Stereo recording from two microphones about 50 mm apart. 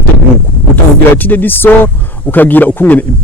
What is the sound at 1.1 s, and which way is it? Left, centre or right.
Speech, left.